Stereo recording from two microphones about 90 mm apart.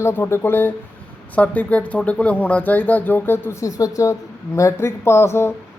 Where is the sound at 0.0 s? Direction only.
30° left (ahead or behind).